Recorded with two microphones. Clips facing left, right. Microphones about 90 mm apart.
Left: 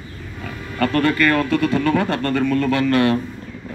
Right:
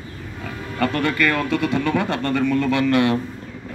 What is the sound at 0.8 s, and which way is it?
A man's voice, 15° right (ahead or behind).